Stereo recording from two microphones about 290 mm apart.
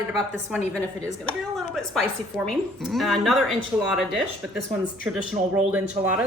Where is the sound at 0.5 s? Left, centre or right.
Centre.